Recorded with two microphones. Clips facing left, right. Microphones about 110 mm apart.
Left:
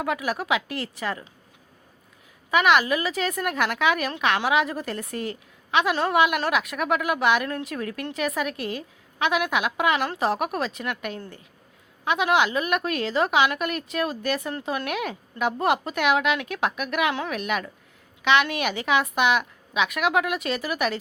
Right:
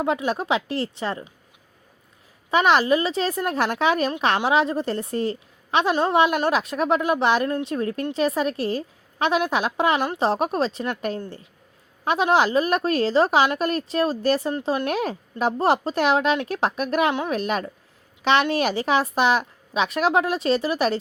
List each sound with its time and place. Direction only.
0.0 s a woman's voice: 25° right (ahead or behind)
2.5 s a woman's voice: 30° right (ahead or behind)